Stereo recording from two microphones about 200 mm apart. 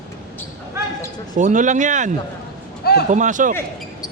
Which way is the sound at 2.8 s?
50° left (ahead or behind).